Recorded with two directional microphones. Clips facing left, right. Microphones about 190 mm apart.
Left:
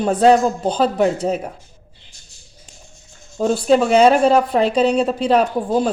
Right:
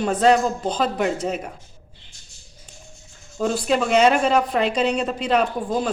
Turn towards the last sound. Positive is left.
turn(degrees=35)  # may be behind; listen again after turning